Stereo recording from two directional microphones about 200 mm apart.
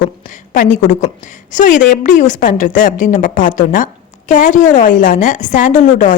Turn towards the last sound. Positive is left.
turn(degrees=40)  # may be behind; listen again after turning